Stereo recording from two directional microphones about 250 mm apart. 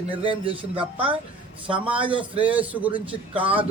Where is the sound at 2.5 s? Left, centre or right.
Centre.